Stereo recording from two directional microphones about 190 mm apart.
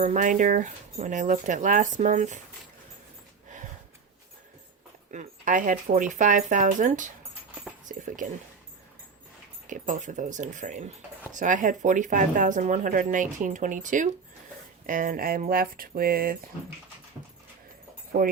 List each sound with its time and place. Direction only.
0.0 s speech: 40° right (ahead or behind)
5.1 s speech: 45° right (ahead or behind)
9.6 s speech: 40° right (ahead or behind)